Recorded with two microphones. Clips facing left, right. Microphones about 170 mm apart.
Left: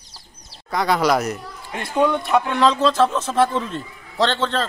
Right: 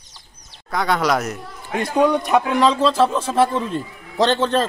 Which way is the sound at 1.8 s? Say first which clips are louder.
Right 2 dB; 15° right (ahead or behind).